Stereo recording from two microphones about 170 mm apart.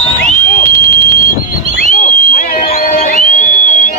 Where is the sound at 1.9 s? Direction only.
50° left (ahead or behind).